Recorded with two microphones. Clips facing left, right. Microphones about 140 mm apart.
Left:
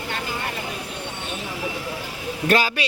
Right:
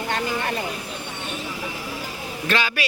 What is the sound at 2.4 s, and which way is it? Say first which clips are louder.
Speech: left 4 dB; 40° left (ahead or behind).